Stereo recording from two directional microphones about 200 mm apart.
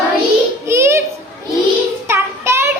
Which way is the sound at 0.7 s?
15° right (ahead or behind).